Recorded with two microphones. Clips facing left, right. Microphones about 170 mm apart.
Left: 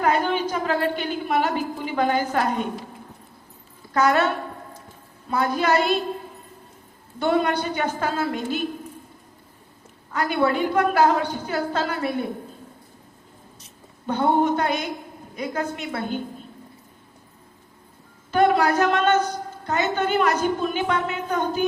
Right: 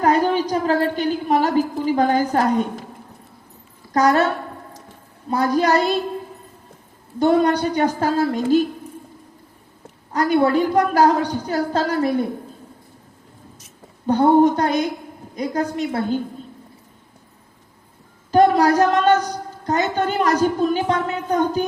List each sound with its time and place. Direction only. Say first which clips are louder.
0.0 s a sound: right 4 dB; 40° right (ahead or behind)
0.5 s a woman's voice: right 4 dB; 40° right (ahead or behind)
3.9 s a woman's voice: right 3 dB; 40° right (ahead or behind)
5.3 s a woman's voice: right 4 dB; 40° right (ahead or behind)
7.2 s a woman's voice: right 5 dB; 35° right (ahead or behind)
10.1 s a woman's voice: right 5 dB; 40° right (ahead or behind)
14.1 s a woman's voice: right 6 dB; 40° right (ahead or behind)
18.3 s a woman's voice: right 4 dB; 35° right (ahead or behind)